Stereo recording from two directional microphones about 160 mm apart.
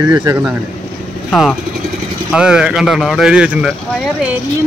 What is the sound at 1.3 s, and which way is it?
Speech, centre (ahead or behind).